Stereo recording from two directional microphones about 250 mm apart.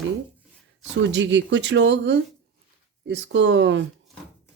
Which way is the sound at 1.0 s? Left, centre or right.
Right.